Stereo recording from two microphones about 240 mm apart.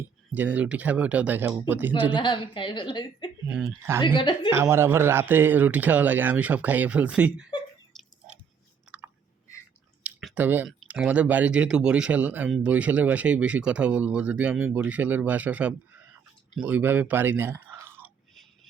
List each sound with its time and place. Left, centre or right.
0.3 s speech: centre
2.1 s a woman's voice: centre
3.4 s speech: centre
4.0 s a woman's voice: centre
4.5 s speech: centre
7.9 s drip: centre
10.0 s speech: centre